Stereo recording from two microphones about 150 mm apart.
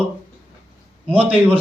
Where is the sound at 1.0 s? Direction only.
10° right (ahead or behind).